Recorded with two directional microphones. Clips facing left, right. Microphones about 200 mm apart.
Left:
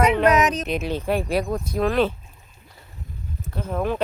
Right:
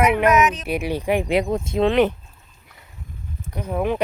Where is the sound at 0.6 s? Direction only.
10° right (ahead or behind).